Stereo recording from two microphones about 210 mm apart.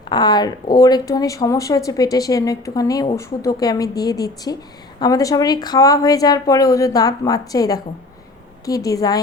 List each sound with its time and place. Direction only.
0.1 s speech: 20° left (ahead or behind)